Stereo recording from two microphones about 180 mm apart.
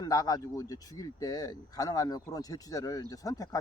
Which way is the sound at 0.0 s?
20° left (ahead or behind).